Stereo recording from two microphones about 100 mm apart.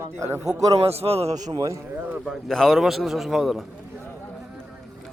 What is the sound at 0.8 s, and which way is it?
Speech, 90° right.